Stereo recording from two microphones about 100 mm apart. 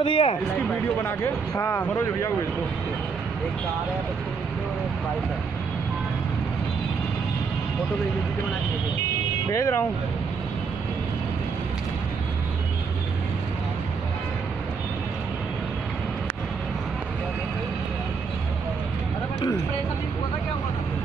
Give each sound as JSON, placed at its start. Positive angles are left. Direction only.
{"t": 0.0, "sound": "speech", "side_deg": 60}
{"t": 1.0, "sound": "speech", "side_deg": 25}
{"t": 9.5, "sound": "speech", "side_deg": 35}